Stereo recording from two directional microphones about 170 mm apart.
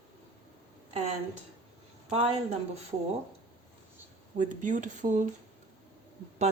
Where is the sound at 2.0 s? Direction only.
40° right (ahead or behind).